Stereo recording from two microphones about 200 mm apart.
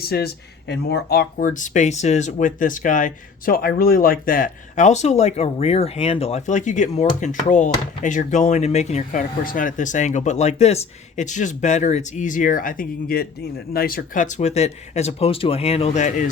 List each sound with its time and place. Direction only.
0.0 s speech: 50° left (ahead or behind)